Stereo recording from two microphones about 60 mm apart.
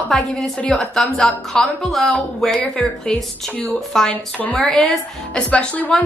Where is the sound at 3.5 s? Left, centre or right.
Left.